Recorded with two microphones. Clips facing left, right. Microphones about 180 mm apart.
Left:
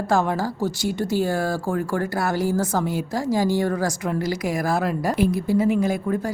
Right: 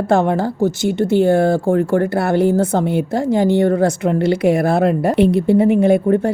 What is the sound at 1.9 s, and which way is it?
A woman's voice, 55° right (ahead or behind).